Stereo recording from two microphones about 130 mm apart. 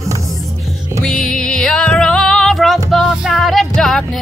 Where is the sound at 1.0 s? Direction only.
5° left (ahead or behind).